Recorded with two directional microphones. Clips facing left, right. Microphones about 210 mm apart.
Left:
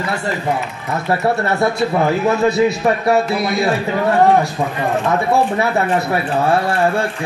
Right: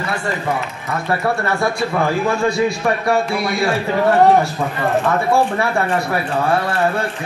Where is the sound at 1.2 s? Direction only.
25° left (ahead or behind).